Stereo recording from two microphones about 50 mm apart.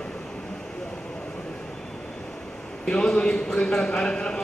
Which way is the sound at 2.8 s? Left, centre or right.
Centre.